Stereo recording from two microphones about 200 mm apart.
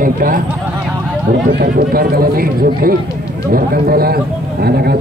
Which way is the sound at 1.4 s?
50° right (ahead or behind).